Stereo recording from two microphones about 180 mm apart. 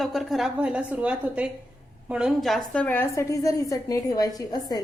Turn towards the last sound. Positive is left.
turn(degrees=20)  # may be behind; listen again after turning